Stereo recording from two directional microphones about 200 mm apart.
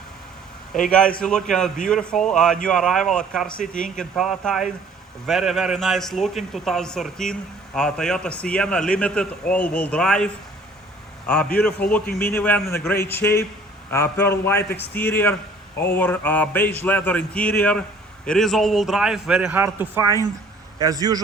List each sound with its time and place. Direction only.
0.7 s speech: 5° left (ahead or behind)
11.5 s a man's voice: 5° left (ahead or behind); by 21.2 s 20° right (ahead or behind)